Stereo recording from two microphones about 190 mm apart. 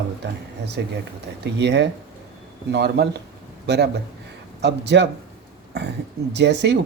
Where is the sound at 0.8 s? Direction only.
60° right (ahead or behind).